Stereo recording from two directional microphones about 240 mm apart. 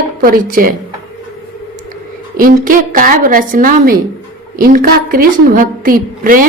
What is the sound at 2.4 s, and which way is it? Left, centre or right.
A woman's voice, right.